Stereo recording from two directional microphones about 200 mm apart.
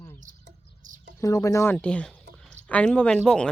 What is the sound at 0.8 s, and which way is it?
Bird, 40° right (ahead or behind).